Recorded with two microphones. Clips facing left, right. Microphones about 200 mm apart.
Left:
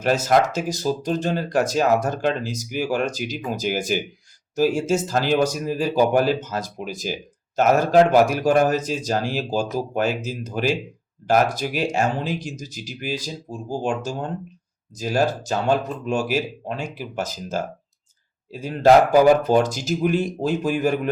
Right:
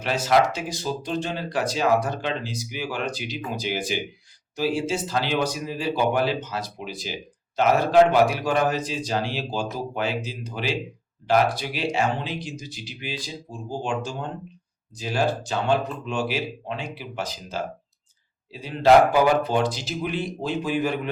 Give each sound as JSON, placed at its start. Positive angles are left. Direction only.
{"t": 0.0, "sound": "speech", "side_deg": 45}